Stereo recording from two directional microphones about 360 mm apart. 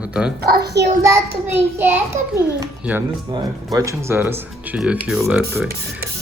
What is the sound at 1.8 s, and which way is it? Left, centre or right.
A child's voice, centre.